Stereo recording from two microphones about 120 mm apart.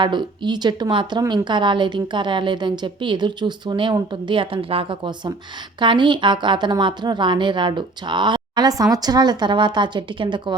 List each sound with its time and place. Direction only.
0.0 s a woman's voice: 40° right (ahead or behind)